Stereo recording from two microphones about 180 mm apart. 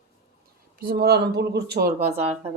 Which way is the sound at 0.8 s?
55° right (ahead or behind).